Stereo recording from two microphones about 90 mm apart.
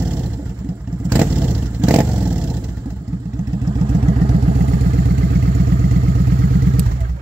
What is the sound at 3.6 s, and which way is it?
Vehicle, 55° right (ahead or behind).